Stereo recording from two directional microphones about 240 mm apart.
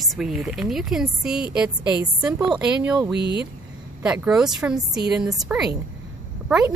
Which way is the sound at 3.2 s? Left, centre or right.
Right.